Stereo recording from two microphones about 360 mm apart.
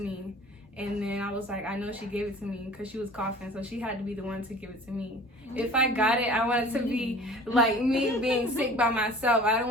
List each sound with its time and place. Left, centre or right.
0.8 s a woman's voice: centre
3.5 s a woman's voice: centre
5.5 s a woman's voice: centre